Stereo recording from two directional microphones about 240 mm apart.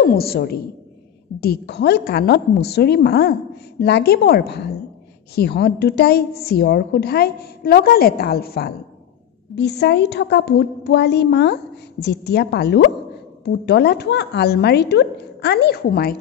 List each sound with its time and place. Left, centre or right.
0.0 s a woman's voice: left